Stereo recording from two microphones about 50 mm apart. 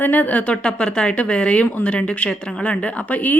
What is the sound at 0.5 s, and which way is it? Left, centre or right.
A woman's voice, centre.